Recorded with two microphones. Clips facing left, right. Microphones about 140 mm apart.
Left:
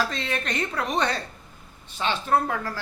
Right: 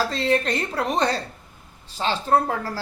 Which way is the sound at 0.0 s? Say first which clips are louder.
Right 6 dB; 35° right (ahead or behind).